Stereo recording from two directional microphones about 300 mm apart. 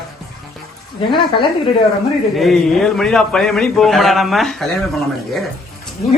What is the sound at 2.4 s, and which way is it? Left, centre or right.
A woman's voice, centre.